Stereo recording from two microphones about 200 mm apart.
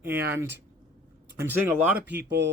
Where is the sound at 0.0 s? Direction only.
50° right (ahead or behind).